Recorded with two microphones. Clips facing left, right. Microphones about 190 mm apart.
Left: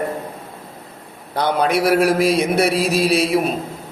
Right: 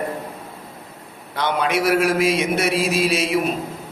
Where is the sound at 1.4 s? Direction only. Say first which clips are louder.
Left 3 dB; 35° left (ahead or behind).